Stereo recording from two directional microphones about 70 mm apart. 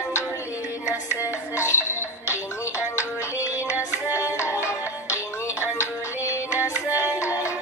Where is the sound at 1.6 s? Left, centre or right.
Left.